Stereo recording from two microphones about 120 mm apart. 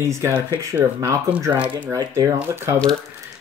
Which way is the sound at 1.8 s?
25° right (ahead or behind).